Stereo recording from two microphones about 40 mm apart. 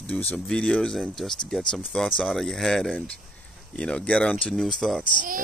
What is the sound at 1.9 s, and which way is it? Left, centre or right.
Speech, left.